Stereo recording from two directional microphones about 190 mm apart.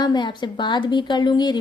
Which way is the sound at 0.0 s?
20° left (ahead or behind).